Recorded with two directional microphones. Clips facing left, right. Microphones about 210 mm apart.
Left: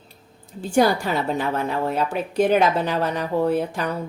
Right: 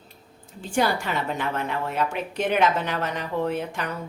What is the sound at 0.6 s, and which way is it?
A woman's voice, 40° left (ahead or behind).